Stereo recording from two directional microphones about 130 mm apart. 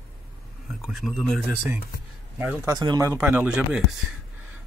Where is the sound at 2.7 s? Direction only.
30° right (ahead or behind).